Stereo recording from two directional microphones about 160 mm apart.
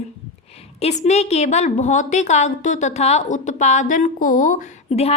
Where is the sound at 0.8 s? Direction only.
45° left (ahead or behind).